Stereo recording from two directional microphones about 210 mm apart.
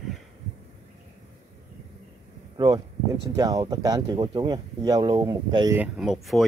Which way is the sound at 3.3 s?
20° right (ahead or behind).